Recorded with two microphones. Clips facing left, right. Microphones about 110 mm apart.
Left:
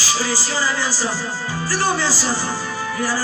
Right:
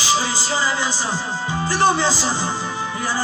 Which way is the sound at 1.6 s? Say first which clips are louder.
Right 3 dB; 20° right (ahead or behind).